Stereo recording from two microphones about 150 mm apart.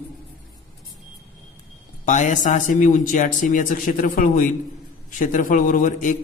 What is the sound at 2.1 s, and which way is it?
A man's voice, 55° left (ahead or behind).